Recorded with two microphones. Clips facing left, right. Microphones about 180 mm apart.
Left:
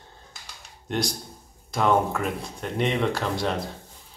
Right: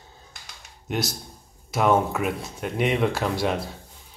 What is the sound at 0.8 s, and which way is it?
Speech, 5° right (ahead or behind).